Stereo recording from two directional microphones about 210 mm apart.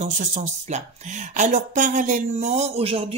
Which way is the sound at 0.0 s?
35° right (ahead or behind).